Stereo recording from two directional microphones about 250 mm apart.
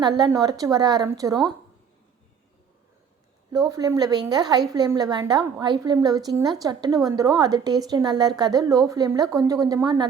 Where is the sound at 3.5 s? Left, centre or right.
Centre.